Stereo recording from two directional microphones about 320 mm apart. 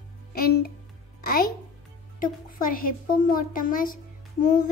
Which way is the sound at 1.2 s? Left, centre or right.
Left.